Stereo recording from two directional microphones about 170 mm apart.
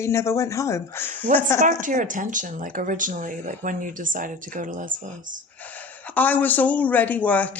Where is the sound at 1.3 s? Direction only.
50° right (ahead or behind).